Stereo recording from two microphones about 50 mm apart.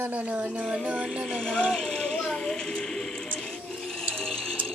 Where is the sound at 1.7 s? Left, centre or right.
Centre.